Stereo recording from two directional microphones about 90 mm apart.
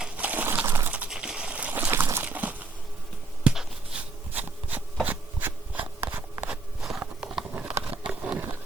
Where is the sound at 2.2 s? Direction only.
20° right (ahead or behind).